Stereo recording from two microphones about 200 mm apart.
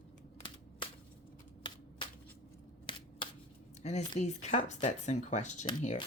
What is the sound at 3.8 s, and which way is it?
Speech, 35° left (ahead or behind).